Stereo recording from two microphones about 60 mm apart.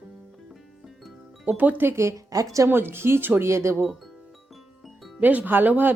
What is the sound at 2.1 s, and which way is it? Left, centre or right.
Speech, right.